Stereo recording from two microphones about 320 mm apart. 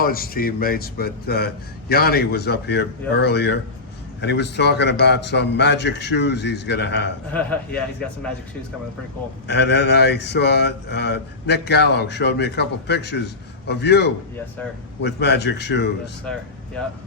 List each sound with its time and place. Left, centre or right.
0.0 s speech: left
7.3 s a man's voice: centre
9.5 s speech: left